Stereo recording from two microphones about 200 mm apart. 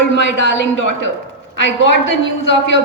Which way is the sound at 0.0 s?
65° left (ahead or behind).